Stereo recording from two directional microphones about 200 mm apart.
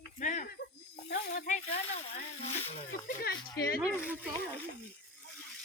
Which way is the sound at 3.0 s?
50° left (ahead or behind).